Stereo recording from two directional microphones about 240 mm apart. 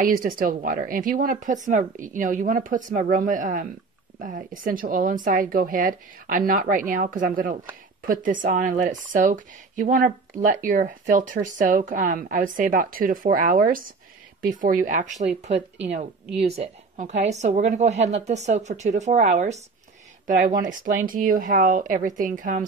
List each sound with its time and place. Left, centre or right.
0.0 s a woman's voice: right